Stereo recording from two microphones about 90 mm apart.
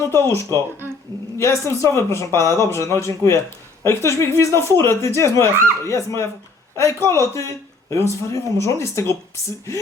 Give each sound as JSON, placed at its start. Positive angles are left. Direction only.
{"t": 0.1, "sound": "speech", "side_deg": 30}